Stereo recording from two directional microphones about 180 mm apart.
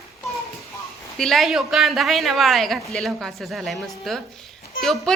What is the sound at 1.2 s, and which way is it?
A woman's voice, centre (ahead or behind).